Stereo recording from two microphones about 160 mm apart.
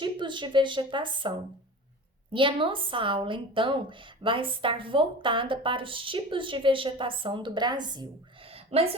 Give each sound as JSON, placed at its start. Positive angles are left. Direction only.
{"t": 0.0, "sound": "a woman's voice", "side_deg": -30}
{"t": 2.3, "sound": "a woman's voice", "side_deg": -30}
{"t": 8.4, "sound": "a sound", "side_deg": -35}